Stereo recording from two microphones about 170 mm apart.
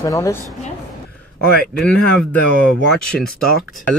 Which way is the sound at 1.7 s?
5° left (ahead or behind).